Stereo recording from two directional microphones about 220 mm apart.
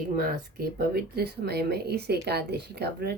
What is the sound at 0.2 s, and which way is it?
Speech, 40° right (ahead or behind).